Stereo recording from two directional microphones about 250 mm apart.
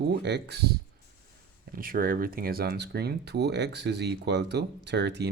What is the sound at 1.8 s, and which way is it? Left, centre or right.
Speech, right.